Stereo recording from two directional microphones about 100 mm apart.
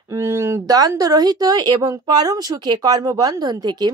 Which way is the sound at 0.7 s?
40° right (ahead or behind).